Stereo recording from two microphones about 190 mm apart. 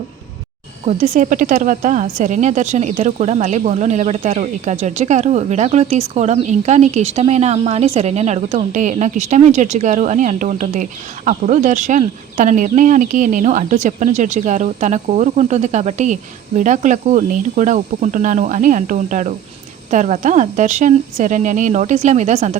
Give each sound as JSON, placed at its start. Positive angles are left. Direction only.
{"t": 0.9, "sound": "a woman's voice", "side_deg": -35}